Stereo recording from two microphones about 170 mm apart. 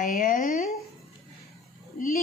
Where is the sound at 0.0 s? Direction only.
55° left (ahead or behind).